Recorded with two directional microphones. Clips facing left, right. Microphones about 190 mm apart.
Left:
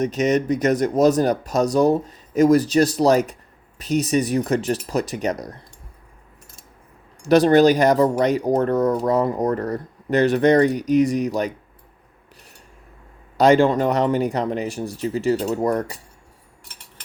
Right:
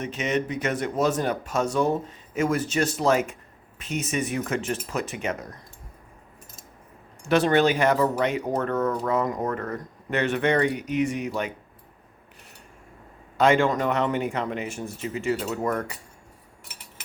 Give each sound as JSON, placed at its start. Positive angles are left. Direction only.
{"t": 0.0, "sound": "speech", "side_deg": 40}
{"t": 7.2, "sound": "speech", "side_deg": 40}
{"t": 13.3, "sound": "speech", "side_deg": 35}